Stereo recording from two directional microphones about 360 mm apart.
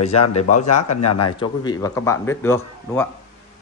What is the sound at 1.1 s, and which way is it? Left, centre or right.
Speech, left.